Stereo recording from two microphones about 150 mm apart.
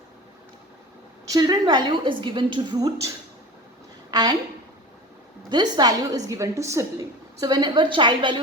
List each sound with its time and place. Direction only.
1.3 s a woman's voice: 25° right (ahead or behind)
4.1 s a woman's voice: 30° right (ahead or behind)
5.5 s a woman's voice: 30° right (ahead or behind)